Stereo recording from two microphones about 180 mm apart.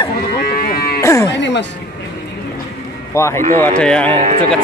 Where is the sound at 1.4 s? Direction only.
80° left.